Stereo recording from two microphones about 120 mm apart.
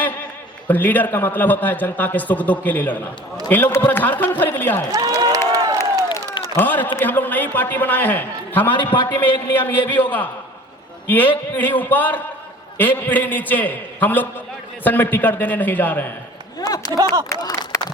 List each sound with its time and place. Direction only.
0.7 s a man's voice: 15° left (ahead or behind)
4.9 s speech: 30° right (ahead or behind)
5.5 s crowd: 30° right (ahead or behind)
6.6 s a man's voice: 15° left (ahead or behind)
16.6 s a sound: 30° left (ahead or behind)